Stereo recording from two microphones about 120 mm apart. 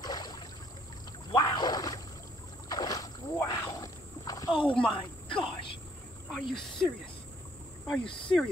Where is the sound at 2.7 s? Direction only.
30° left (ahead or behind).